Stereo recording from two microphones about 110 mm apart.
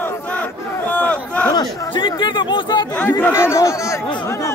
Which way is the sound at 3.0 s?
15° left (ahead or behind).